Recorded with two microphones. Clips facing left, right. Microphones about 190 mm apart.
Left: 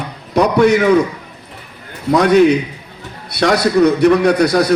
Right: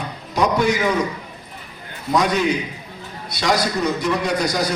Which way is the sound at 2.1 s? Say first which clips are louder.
Left 9 dB; 65° left (ahead or behind).